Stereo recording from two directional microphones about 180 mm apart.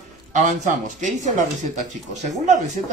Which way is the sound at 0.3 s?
45° right (ahead or behind).